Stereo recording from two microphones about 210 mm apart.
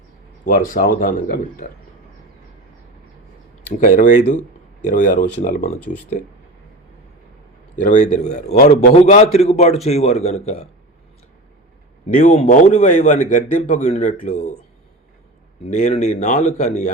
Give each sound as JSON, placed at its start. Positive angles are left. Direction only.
{"t": 0.7, "sound": "a man's voice", "side_deg": 40}
{"t": 3.8, "sound": "a man's voice", "side_deg": 40}
{"t": 7.8, "sound": "a man's voice", "side_deg": 35}
{"t": 12.0, "sound": "a man's voice", "side_deg": 35}
{"t": 15.6, "sound": "a man's voice", "side_deg": 35}